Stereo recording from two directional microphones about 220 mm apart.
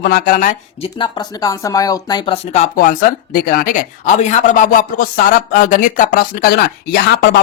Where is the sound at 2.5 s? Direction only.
35° left (ahead or behind).